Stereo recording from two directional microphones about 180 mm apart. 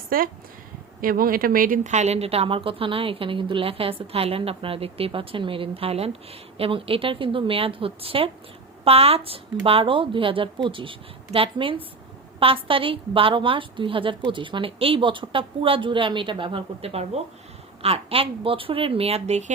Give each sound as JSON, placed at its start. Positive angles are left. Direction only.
{"t": 0.1, "sound": "a woman's voice", "side_deg": -50}